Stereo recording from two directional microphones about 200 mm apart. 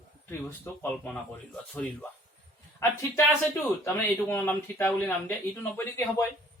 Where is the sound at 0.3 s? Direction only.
10° left (ahead or behind).